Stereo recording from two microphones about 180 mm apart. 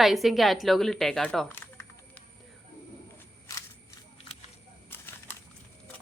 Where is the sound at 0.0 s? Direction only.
Centre (ahead or behind).